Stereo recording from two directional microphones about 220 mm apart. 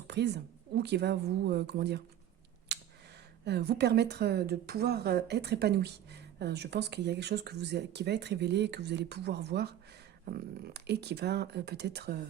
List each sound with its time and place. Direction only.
0.8 s a woman's voice: 50° right (ahead or behind)
2.7 s a sound: 50° right (ahead or behind)
3.4 s a woman's voice: 50° right (ahead or behind)
10.8 s a woman's voice: 50° right (ahead or behind)